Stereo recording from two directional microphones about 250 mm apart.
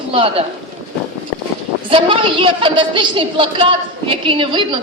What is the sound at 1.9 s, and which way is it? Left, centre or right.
A woman's voice, centre.